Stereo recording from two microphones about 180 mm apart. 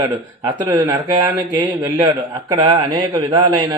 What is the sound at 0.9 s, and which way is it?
Speech, 15° right (ahead or behind).